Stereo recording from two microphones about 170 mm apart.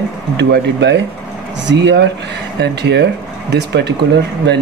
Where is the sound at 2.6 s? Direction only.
80° right.